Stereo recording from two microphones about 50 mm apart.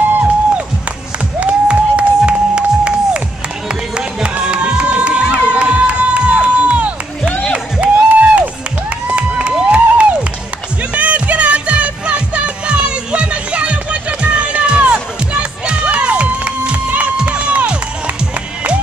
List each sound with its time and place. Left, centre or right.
1.4 s music: right
3.9 s crowd: right
7.8 s a sound: right
9.0 s crowd: right
10.9 s music: right
15.8 s crowd: right
17.2 s music: right